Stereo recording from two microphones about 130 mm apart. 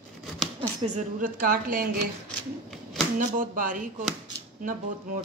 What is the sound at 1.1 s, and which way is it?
Speech, 90° right.